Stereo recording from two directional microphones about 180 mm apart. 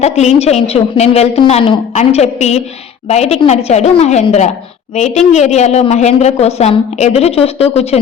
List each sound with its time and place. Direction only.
0.0 s a woman's voice: 35° left (ahead or behind)